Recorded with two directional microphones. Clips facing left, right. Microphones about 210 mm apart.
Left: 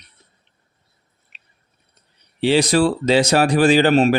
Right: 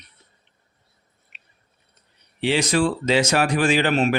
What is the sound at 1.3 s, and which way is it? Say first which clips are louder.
Chewing: even; 35° left (ahead or behind).